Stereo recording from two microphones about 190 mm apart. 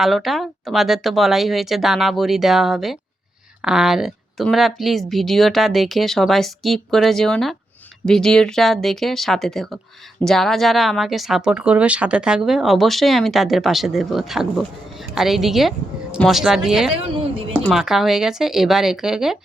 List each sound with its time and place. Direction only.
0.0 s speech: centre (ahead or behind)
16.9 s a sound: 30° right (ahead or behind)
17.6 s speech: centre (ahead or behind)